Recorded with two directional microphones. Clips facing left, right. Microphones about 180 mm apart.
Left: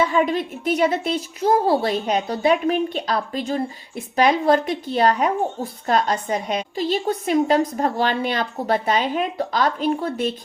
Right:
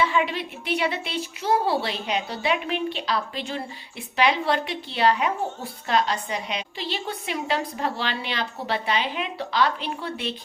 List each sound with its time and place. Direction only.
0.0 s a child's voice: 45° left (ahead or behind)